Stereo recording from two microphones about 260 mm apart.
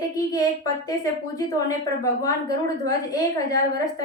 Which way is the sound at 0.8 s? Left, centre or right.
Centre.